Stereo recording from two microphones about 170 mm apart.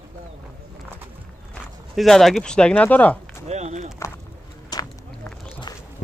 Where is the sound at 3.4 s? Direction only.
40° right (ahead or behind).